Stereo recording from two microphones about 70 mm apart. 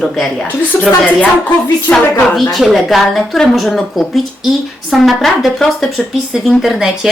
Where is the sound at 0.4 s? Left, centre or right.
Left.